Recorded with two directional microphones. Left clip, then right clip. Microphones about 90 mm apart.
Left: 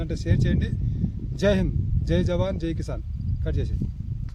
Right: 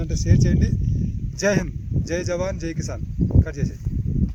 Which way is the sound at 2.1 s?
Centre (ahead or behind).